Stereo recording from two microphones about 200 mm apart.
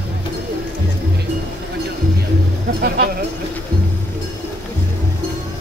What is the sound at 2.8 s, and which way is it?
Speech, 50° right (ahead or behind).